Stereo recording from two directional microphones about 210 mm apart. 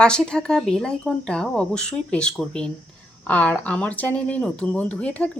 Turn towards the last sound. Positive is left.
turn(degrees=5)  # may be behind; listen again after turning